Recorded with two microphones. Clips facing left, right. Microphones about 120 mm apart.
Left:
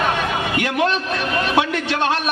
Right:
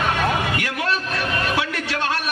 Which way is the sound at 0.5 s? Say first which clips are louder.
Left 5 dB; 25° left (ahead or behind).